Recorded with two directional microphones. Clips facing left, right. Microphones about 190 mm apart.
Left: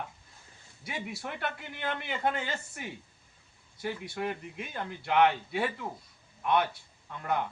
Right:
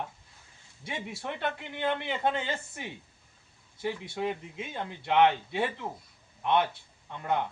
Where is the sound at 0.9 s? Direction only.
25° right (ahead or behind).